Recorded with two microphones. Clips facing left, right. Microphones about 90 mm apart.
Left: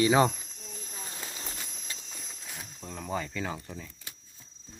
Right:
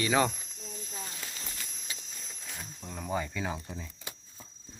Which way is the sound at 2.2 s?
5° left (ahead or behind).